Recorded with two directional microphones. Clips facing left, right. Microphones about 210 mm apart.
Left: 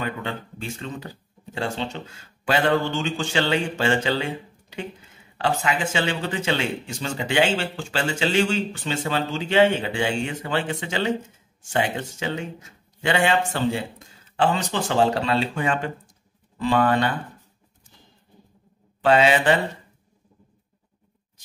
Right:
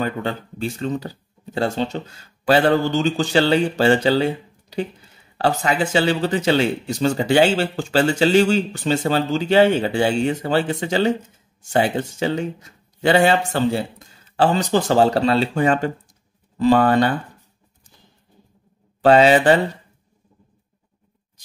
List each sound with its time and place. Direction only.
0.0 s speech: 35° right (ahead or behind)
18.9 s speech: 35° right (ahead or behind)